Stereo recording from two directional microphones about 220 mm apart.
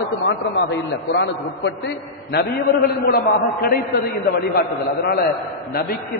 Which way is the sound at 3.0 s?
40° left (ahead or behind).